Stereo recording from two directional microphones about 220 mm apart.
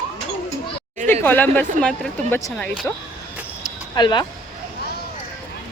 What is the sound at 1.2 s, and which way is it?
Speech, 10° left (ahead or behind).